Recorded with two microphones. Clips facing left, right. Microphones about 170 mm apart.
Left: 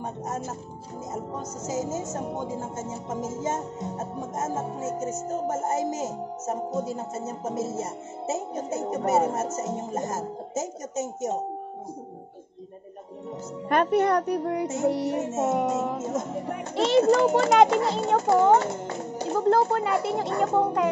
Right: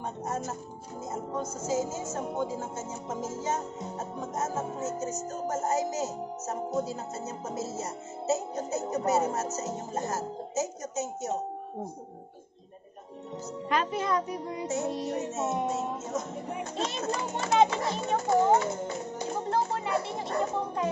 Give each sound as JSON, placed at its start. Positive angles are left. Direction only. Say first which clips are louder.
{"t": 0.0, "sound": "speech", "louder": "left 1 dB", "side_deg": 20}
{"t": 1.6, "sound": "speech", "louder": "left 1 dB", "side_deg": 20}
{"t": 5.3, "sound": "speech", "louder": "left 3 dB", "side_deg": 25}
{"t": 5.8, "sound": "music", "louder": "left 2 dB", "side_deg": 50}
{"t": 6.4, "sound": "speech", "louder": "left 2 dB", "side_deg": 25}
{"t": 6.9, "sound": "music", "louder": "left 4 dB", "side_deg": 50}
{"t": 8.6, "sound": "music", "louder": "left 2 dB", "side_deg": 50}
{"t": 13.7, "sound": "speech", "louder": "left 7 dB", "side_deg": 60}
{"t": 14.9, "sound": "speech", "louder": "left 6 dB", "side_deg": 70}
{"t": 15.3, "sound": "music", "louder": "left 7 dB", "side_deg": 50}
{"t": 15.8, "sound": "speech", "louder": "left 5 dB", "side_deg": 90}
{"t": 16.1, "sound": "speech", "louder": "left 5 dB", "side_deg": 55}